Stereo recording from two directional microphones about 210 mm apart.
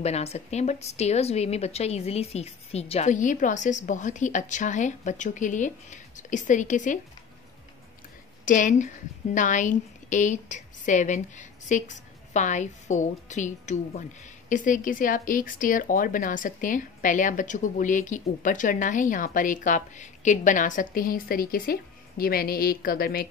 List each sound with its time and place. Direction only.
0.0 s a woman's voice: 30° left (ahead or behind)
8.5 s a woman's voice: 35° left (ahead or behind)